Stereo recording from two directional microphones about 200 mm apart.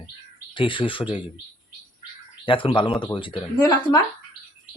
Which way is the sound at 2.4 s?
25° left (ahead or behind).